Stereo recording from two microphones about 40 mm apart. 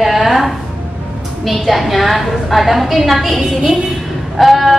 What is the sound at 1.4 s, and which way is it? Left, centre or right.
A woman's voice, centre.